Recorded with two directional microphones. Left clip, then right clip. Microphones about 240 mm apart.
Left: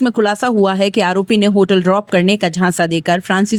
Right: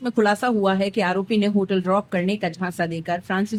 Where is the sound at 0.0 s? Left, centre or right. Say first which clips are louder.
Left 6 dB; left.